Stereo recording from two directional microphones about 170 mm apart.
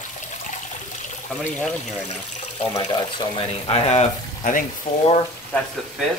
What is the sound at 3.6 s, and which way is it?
Speech, 40° left (ahead or behind).